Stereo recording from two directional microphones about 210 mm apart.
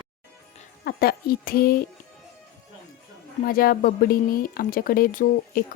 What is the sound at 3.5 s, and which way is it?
Speech, 45° left (ahead or behind).